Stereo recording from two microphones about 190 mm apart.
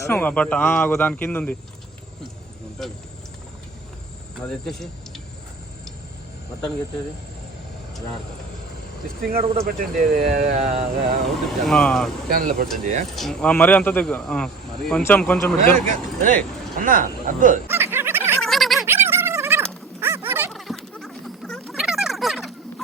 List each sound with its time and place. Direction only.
0.0 s speech: 10° left (ahead or behind)
4.4 s speech: centre (ahead or behind)
9.6 s speech: 50° right (ahead or behind)
11.4 s speech: centre (ahead or behind)
12.3 s speech: 50° right (ahead or behind)
13.1 s speech: centre (ahead or behind)
15.9 s speech: 45° right (ahead or behind)
17.7 s music: 10° right (ahead or behind)
18.4 s a sound: centre (ahead or behind)
18.9 s a sound: 10° right (ahead or behind)
20.5 s a sound: centre (ahead or behind)